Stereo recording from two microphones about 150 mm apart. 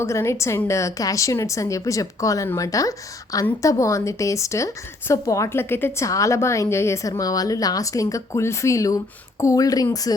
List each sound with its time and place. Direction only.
0.0 s a woman's voice: 20° left (ahead or behind)